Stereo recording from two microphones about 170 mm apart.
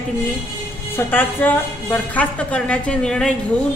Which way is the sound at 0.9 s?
10° left (ahead or behind).